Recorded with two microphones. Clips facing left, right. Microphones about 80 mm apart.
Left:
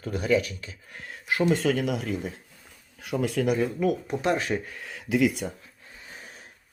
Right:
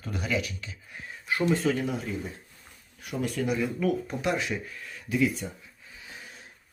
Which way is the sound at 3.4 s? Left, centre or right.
Left.